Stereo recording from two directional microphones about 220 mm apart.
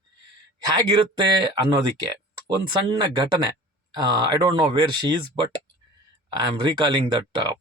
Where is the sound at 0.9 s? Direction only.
20° right (ahead or behind).